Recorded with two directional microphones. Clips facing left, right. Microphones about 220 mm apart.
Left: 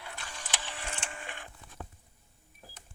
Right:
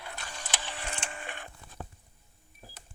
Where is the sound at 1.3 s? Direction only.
60° right (ahead or behind).